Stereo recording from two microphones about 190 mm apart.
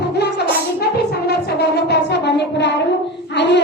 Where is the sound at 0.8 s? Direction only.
60° left (ahead or behind).